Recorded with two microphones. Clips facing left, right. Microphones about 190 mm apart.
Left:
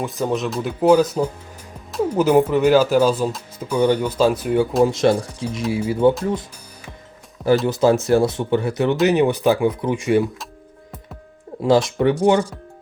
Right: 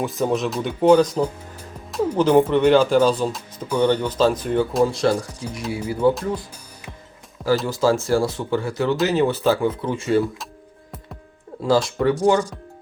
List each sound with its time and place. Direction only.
0.0 s speech: centre (ahead or behind)
4.8 s speech: 20° left (ahead or behind)
7.7 s speech: 20° left (ahead or behind)
11.6 s speech: 20° left (ahead or behind)